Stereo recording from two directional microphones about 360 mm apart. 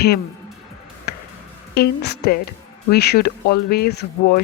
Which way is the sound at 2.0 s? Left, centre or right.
Left.